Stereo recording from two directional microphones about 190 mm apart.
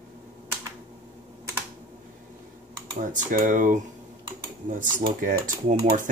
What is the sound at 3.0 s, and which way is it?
Speech, 45° right (ahead or behind).